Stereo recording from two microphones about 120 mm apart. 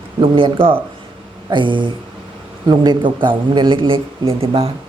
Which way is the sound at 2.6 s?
35° right (ahead or behind).